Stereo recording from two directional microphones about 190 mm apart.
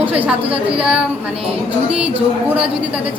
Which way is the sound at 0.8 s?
5° right (ahead or behind).